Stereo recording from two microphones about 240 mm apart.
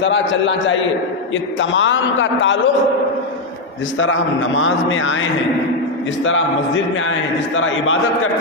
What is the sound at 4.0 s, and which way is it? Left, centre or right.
A man's voice, left.